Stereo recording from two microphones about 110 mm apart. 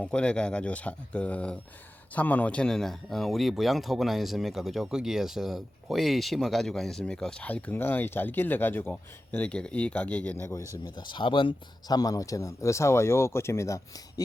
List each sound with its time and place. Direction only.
0.0 s speech: 10° left (ahead or behind)
10.3 s speech: 25° left (ahead or behind)
10.8 s speech: 45° left (ahead or behind); by 14.0 s 30° left (ahead or behind)